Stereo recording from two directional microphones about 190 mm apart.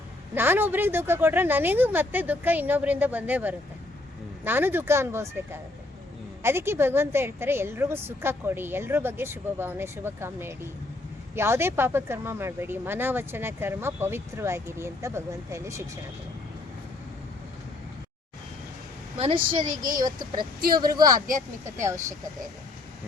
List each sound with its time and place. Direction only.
0.3 s speech: 10° right (ahead or behind)
19.2 s speech: 25° right (ahead or behind)
19.6 s speech: 45° right (ahead or behind)
20.0 s speech: 20° right (ahead or behind)